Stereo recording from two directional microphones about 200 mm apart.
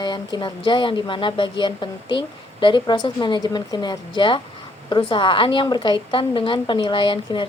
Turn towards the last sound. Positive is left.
turn(degrees=25)  # may be behind; listen again after turning